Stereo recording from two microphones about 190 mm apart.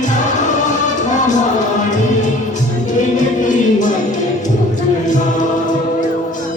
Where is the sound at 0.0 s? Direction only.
40° left (ahead or behind).